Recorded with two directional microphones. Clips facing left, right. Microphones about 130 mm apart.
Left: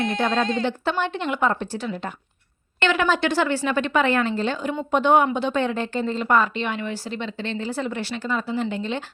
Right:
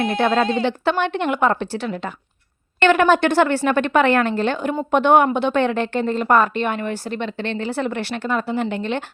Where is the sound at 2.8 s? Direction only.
55° right (ahead or behind).